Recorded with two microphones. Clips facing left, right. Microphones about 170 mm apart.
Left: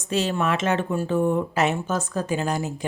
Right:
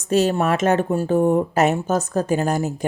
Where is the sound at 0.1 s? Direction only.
45° right (ahead or behind).